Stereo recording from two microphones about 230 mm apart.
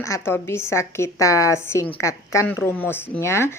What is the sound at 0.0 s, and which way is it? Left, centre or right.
Speech, centre.